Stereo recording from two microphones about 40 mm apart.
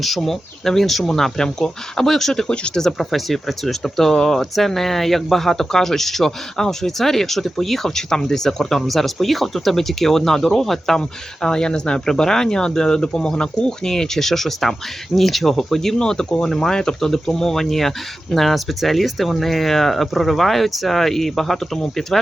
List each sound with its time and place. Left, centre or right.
0.0 s speech: centre
1.1 s speech: centre
2.5 s speech: left
2.8 s speech: centre
16.0 s speech: centre